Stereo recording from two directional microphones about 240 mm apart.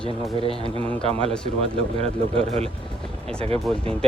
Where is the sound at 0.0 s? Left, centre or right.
Right.